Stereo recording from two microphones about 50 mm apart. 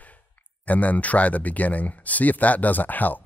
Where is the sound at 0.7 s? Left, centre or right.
Left.